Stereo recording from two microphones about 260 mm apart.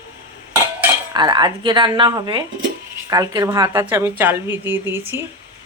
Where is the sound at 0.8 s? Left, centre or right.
Centre.